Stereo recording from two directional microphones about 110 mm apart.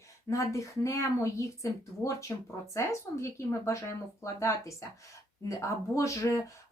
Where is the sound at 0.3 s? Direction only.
30° left (ahead or behind).